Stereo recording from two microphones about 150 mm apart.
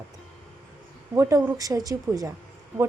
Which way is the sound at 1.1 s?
20° right (ahead or behind).